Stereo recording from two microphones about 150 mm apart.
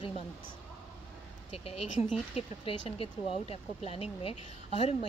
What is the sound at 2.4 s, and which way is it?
A woman's voice, 40° left (ahead or behind).